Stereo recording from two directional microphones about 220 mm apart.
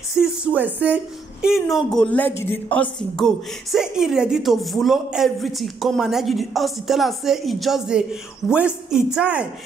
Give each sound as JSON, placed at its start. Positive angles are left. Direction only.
{"t": 0.1, "sound": "a woman's voice", "side_deg": -5}